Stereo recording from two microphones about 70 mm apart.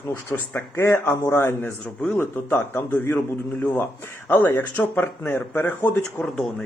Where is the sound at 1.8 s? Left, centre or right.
Centre.